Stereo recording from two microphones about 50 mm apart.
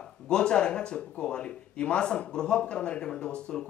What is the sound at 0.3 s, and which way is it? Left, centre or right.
Speech, centre.